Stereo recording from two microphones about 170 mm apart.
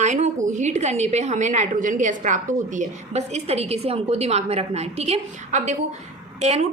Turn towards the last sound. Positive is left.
turn(degrees=-40)  # may be behind; listen again after turning